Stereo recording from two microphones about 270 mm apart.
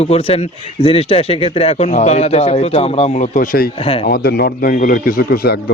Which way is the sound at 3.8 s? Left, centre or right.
Left.